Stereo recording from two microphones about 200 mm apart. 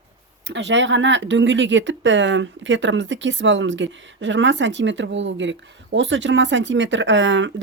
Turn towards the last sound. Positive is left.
turn(degrees=-65)  # may be behind; listen again after turning